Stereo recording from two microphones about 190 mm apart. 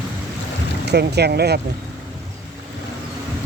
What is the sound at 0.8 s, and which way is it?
Speech, 60° right (ahead or behind).